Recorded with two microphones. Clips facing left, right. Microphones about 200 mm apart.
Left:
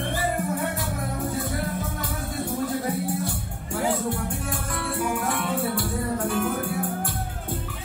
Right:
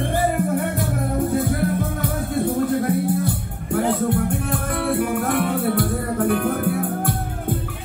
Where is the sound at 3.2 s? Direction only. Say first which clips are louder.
Right 6 dB; 60° right (ahead or behind).